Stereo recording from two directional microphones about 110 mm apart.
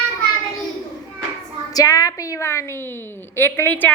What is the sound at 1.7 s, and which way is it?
A woman's voice, 35° left (ahead or behind).